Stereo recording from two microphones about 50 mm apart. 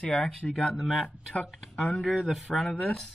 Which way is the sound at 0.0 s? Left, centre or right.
Centre.